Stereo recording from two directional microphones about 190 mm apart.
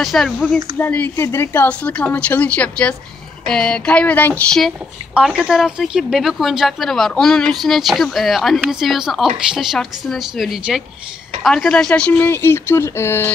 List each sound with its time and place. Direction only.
0.0 s speech: centre (ahead or behind)